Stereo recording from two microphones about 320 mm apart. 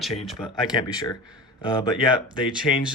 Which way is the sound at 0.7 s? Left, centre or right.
Centre.